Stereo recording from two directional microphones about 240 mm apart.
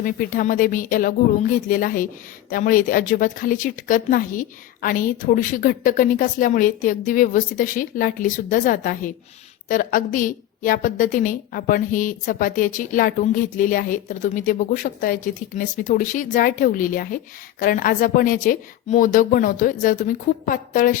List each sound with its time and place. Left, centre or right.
0.0 s a woman's voice: left